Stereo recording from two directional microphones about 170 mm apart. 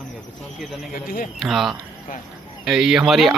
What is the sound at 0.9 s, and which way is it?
Speech, 55° left (ahead or behind).